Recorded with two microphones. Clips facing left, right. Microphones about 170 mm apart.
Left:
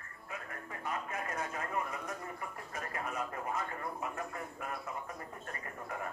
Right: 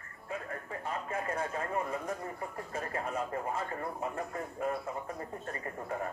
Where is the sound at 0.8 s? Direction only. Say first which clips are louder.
Right 2 dB; 30° right (ahead or behind).